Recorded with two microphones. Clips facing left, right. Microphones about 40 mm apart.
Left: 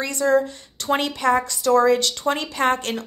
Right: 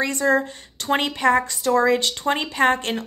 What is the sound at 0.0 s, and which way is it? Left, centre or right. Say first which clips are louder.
Speech: even; right.